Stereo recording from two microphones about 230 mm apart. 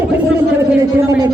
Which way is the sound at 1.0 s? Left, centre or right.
Centre.